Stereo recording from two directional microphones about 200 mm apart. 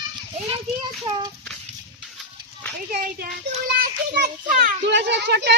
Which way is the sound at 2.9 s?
50° right (ahead or behind).